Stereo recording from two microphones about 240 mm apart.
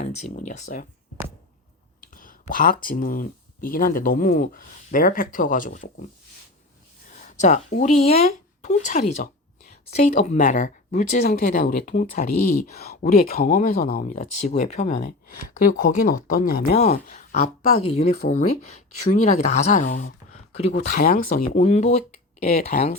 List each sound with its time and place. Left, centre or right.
0.0 s speech: left
2.0 s speech: left
7.1 s speech: left